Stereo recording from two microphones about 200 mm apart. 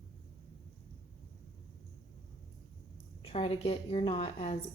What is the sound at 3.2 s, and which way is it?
A woman's voice, 30° left (ahead or behind).